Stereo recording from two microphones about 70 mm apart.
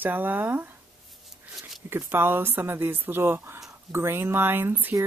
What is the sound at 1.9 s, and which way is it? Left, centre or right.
A woman's voice, right.